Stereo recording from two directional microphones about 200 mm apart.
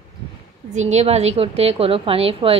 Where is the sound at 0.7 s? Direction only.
35° right (ahead or behind).